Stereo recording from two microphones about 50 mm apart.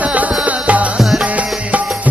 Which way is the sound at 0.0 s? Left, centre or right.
Right.